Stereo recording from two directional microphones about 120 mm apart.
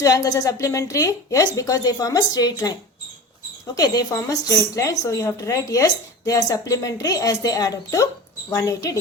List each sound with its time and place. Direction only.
0.0 s speech: 30° left (ahead or behind)
3.8 s speech: 30° left (ahead or behind)